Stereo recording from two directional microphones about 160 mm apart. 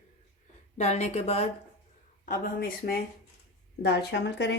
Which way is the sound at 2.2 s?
60° left (ahead or behind).